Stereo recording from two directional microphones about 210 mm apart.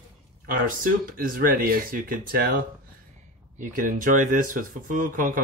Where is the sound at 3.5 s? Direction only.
40° right (ahead or behind).